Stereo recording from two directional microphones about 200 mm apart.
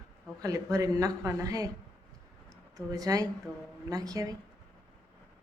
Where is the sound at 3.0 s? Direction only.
20° right (ahead or behind).